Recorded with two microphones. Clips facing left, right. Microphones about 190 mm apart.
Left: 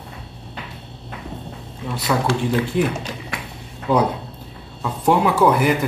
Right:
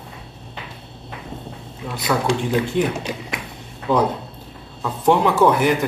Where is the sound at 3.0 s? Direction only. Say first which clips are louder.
Right 2 dB; 15° right (ahead or behind).